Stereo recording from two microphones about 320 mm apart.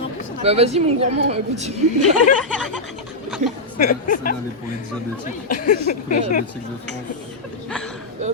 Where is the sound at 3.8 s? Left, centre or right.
Left.